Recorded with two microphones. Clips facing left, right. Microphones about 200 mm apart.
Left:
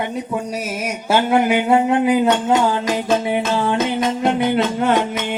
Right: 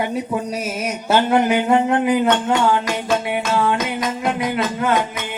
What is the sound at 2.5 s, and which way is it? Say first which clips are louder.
Music: left 1 dB; 35° left (ahead or behind).